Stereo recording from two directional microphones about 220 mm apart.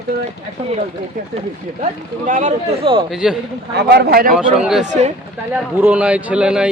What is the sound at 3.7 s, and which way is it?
Speech, 50° right (ahead or behind).